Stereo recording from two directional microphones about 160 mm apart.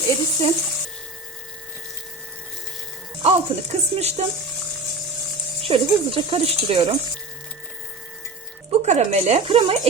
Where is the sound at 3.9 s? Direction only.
40° right (ahead or behind).